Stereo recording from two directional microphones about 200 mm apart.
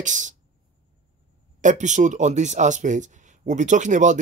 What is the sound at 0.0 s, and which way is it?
Speech, 40° right (ahead or behind).